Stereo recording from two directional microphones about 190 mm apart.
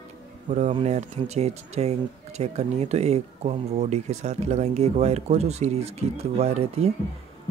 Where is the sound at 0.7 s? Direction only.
35° right (ahead or behind).